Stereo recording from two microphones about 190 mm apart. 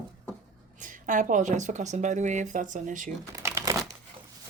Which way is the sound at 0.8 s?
40° right (ahead or behind).